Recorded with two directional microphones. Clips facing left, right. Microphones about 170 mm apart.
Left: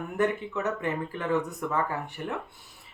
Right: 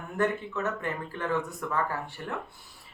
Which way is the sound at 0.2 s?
20° left (ahead or behind).